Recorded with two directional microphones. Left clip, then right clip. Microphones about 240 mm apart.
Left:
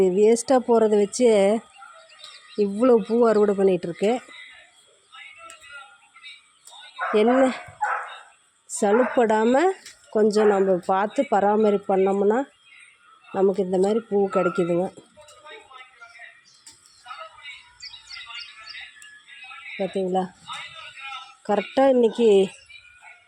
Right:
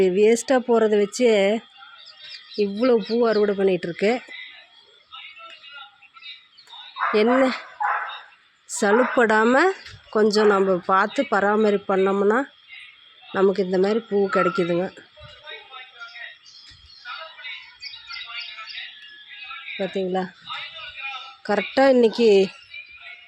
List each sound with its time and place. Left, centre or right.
0.0 s speech: centre
7.1 s speech: centre
8.8 s speech: centre
19.7 s speech: centre
21.4 s speech: centre